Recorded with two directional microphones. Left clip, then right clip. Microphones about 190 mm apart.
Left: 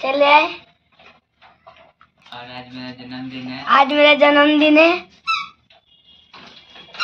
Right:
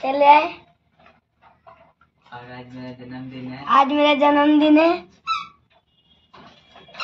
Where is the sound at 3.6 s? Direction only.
10° left (ahead or behind).